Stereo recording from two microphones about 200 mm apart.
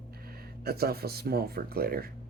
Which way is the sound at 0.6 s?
50° right (ahead or behind).